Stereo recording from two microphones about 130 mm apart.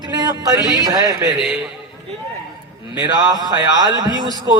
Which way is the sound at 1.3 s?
Centre (ahead or behind).